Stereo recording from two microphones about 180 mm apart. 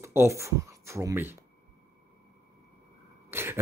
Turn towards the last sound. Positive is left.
turn(degrees=-15)  # may be behind; listen again after turning